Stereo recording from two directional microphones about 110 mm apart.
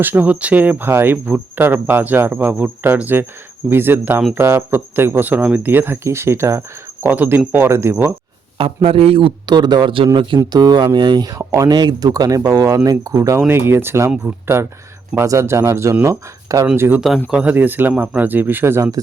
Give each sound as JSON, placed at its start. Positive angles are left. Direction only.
{"t": 0.0, "sound": "speech", "side_deg": -15}
{"t": 8.5, "sound": "a man's voice", "side_deg": -60}